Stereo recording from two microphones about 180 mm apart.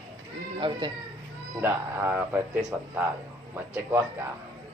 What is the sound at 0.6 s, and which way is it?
Speech, 25° right (ahead or behind).